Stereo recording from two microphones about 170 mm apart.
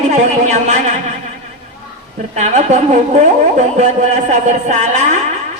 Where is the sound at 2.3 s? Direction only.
45° right (ahead or behind).